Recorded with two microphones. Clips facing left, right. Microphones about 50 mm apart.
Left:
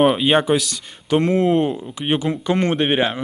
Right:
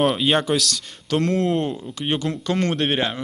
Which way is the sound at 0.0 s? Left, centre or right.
Centre.